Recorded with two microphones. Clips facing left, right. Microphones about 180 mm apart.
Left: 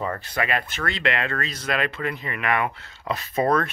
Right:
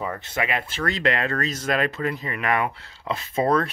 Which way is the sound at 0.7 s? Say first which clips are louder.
Right 2 dB; 35° right (ahead or behind).